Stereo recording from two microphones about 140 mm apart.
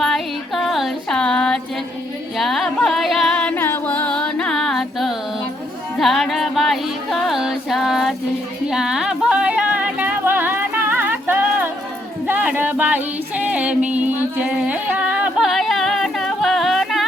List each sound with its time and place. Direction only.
0.0 s music: centre (ahead or behind)